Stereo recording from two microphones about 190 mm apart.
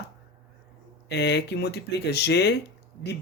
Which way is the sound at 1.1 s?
65° left (ahead or behind).